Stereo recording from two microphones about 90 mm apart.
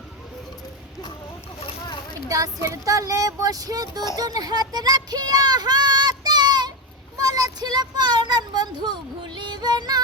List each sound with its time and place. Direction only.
2.3 s speech: 40° right (ahead or behind)
7.2 s child singing: 45° right (ahead or behind)